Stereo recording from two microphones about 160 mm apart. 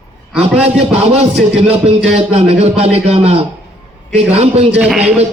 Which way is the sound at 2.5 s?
40° right (ahead or behind).